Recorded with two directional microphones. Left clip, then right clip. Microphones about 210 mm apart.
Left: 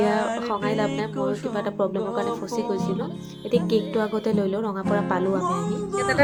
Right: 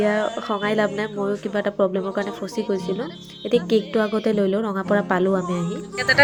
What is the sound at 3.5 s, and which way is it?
Speech, 15° right (ahead or behind).